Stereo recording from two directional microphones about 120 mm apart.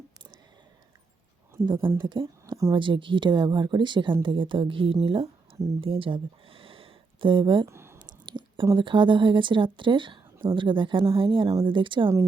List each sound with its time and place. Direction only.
1.6 s speech: 40° right (ahead or behind)
7.7 s a sound: 20° right (ahead or behind)
8.3 s whispering: 40° right (ahead or behind)
8.7 s speech: 40° right (ahead or behind)